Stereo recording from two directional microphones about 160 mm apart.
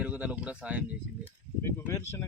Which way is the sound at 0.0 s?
10° right (ahead or behind).